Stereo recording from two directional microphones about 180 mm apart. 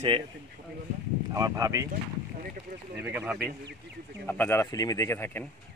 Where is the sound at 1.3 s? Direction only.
20° right (ahead or behind).